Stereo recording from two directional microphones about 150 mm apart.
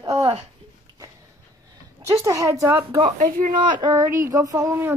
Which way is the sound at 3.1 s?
65° right (ahead or behind).